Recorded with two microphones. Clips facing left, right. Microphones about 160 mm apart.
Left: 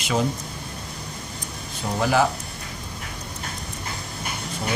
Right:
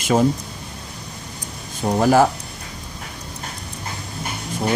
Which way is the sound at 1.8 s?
45° right (ahead or behind).